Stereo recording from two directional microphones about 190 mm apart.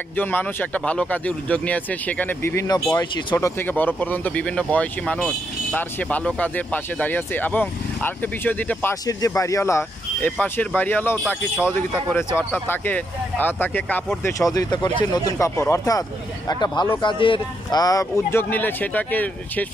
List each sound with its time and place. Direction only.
0.1 s speech: 10° left (ahead or behind)
3.3 s speech: 10° left (ahead or behind)